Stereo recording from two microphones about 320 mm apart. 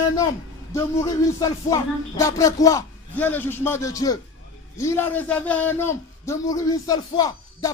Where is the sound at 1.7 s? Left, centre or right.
Centre.